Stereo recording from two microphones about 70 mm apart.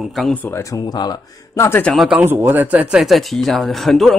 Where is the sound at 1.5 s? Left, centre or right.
Left.